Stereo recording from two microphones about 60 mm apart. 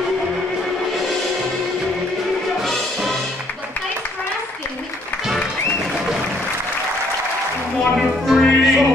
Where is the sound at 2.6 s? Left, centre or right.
Centre.